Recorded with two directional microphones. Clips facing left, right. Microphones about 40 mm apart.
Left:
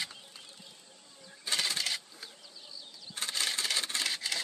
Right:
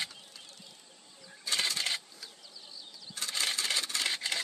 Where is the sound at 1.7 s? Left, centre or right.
Right.